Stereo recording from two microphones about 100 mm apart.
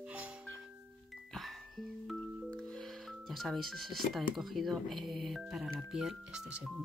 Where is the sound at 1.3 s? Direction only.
Centre (ahead or behind).